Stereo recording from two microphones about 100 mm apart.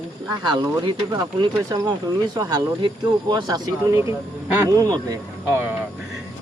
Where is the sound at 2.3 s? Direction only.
40° right (ahead or behind).